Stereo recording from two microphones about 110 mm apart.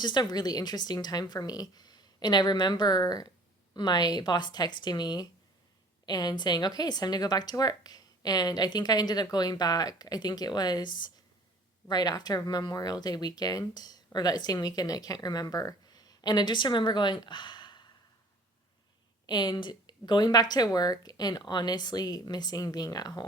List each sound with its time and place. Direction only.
0.0 s speech: 40° left (ahead or behind)
19.2 s a woman's voice: 40° left (ahead or behind)